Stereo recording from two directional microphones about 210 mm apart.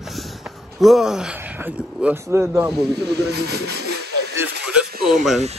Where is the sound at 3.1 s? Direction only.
50° right (ahead or behind).